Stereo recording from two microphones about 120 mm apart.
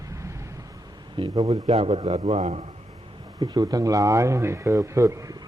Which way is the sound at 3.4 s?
35° right (ahead or behind).